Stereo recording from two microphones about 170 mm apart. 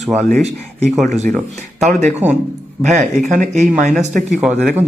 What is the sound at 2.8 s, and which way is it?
Speech, 45° right (ahead or behind).